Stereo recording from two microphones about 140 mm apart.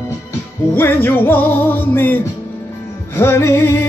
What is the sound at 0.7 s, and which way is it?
Music, 15° left (ahead or behind).